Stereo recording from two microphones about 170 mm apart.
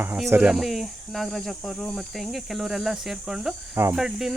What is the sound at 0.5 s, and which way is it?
Cricket, centre (ahead or behind).